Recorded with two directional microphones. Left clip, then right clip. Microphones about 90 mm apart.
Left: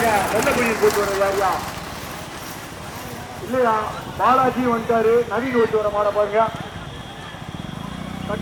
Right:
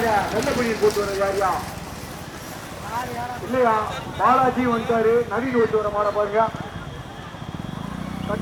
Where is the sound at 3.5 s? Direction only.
10° left (ahead or behind).